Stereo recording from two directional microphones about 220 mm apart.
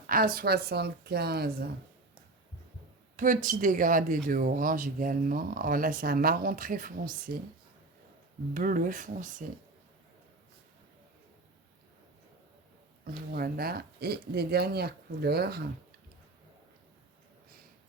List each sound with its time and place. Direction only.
0.1 s speech: 40° right (ahead or behind)
3.2 s speech: 35° right (ahead or behind)
8.5 s speech: 35° right (ahead or behind)
13.3 s speech: 45° right (ahead or behind)